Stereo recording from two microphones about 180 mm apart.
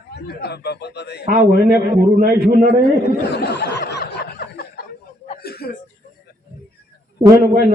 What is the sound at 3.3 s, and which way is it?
Snicker, 70° left (ahead or behind).